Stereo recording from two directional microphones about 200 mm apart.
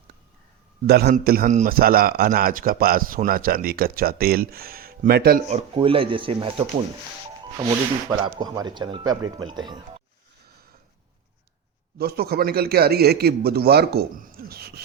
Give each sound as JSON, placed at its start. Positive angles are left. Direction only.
{"t": 0.9, "sound": "a man's voice", "side_deg": -55}
{"t": 5.5, "sound": "speech", "side_deg": -30}
{"t": 8.2, "sound": "speech", "side_deg": -20}
{"t": 11.9, "sound": "a man's voice", "side_deg": -50}